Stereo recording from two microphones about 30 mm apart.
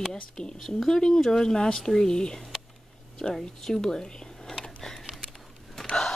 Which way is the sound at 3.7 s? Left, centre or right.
Left.